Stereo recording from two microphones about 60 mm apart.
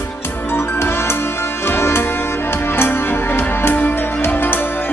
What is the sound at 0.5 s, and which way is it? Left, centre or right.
Music, left.